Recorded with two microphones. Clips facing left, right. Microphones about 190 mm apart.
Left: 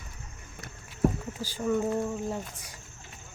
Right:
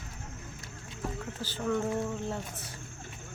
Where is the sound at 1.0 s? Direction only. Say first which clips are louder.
Left 11 dB; 60° left (ahead or behind).